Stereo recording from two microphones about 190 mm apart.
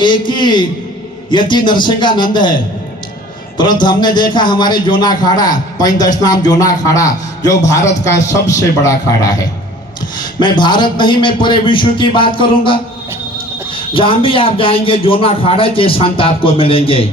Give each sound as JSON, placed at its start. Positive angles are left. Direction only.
{"t": 0.0, "sound": "a man's voice", "side_deg": 25}
{"t": 3.6, "sound": "a man's voice", "side_deg": 25}
{"t": 10.6, "sound": "a man's voice", "side_deg": 25}